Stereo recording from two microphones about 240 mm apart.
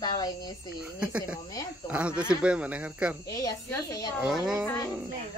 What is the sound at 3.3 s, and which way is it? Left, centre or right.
Speech, centre.